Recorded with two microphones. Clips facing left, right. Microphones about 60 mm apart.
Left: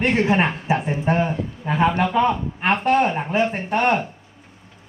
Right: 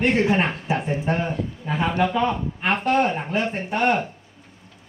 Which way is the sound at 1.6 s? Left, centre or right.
Left.